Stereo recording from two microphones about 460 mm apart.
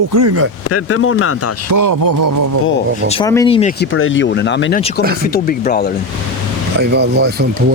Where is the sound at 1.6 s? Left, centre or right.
Right.